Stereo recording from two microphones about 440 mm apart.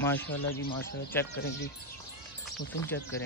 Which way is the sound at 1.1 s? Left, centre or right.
Centre.